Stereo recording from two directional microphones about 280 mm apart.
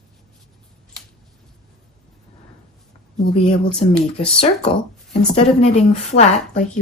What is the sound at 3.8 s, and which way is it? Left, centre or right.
A woman's voice, centre.